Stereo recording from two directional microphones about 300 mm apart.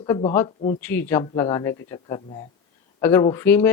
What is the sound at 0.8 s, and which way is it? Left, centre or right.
A man's voice, centre.